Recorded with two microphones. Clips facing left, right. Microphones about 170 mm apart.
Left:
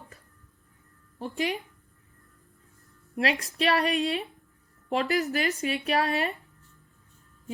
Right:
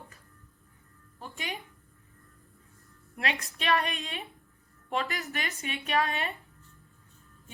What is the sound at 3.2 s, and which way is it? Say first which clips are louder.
Speech: left 7 dB; 35° left (ahead or behind).